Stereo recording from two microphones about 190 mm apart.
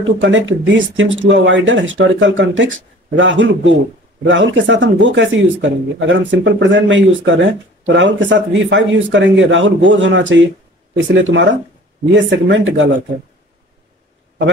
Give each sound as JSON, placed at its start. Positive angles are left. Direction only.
{"t": 0.0, "sound": "speech", "side_deg": -80}